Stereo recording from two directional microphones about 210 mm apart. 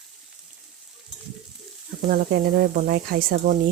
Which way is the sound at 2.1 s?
50° right (ahead or behind).